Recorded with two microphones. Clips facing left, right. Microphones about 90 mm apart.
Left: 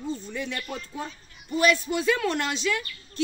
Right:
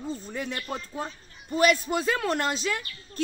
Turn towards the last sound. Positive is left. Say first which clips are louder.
# left 2 dB
turn(degrees=-40)  # may be behind; listen again after turning